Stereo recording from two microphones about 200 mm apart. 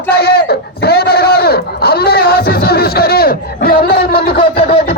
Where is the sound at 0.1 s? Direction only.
50° left (ahead or behind).